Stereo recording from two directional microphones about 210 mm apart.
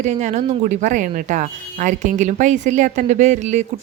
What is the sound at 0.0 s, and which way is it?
A woman's voice, 35° right (ahead or behind).